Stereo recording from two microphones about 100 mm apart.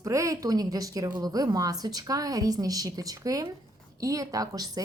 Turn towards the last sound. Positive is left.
turn(degrees=-40)  # may be behind; listen again after turning